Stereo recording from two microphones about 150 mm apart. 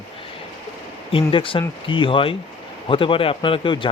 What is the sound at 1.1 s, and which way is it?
Speech, 35° left (ahead or behind).